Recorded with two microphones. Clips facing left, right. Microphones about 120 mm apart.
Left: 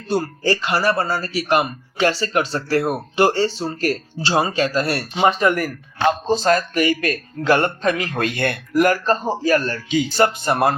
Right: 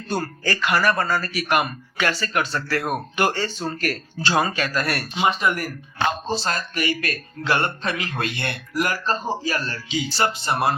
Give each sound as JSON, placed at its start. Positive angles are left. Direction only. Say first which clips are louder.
{"t": 0.1, "sound": "speech", "louder": "left 6 dB", "side_deg": 30}